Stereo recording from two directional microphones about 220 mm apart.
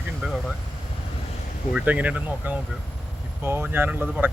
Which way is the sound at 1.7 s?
5° right (ahead or behind).